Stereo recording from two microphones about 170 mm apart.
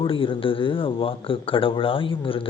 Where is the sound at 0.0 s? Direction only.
30° left (ahead or behind).